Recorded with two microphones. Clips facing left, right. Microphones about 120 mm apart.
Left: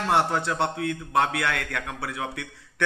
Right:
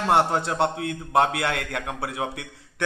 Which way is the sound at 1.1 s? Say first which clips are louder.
Right 3 dB; 25° right (ahead or behind).